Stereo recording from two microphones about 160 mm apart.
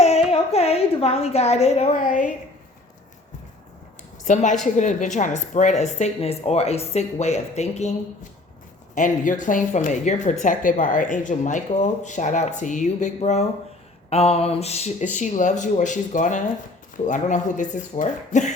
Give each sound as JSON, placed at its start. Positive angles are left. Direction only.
{"t": 0.3, "sound": "a woman's voice", "side_deg": 40}
{"t": 4.2, "sound": "speech", "side_deg": 50}
{"t": 9.0, "sound": "speech", "side_deg": 55}
{"t": 14.1, "sound": "a sound", "side_deg": 40}
{"t": 15.1, "sound": "speech", "side_deg": 50}